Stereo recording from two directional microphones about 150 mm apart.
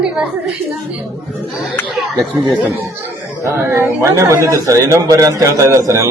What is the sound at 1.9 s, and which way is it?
Speech, centre (ahead or behind).